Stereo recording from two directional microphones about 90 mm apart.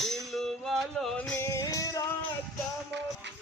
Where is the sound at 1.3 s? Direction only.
30° left (ahead or behind).